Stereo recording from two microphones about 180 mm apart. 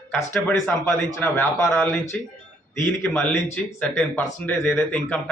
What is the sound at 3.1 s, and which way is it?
Speech, 10° left (ahead or behind).